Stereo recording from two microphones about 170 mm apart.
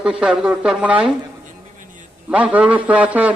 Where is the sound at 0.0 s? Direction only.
5° right (ahead or behind).